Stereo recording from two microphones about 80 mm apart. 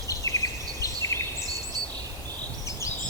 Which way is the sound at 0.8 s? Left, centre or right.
Left.